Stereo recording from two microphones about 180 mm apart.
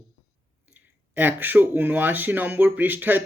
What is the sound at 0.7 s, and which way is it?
Speech, 10° right (ahead or behind).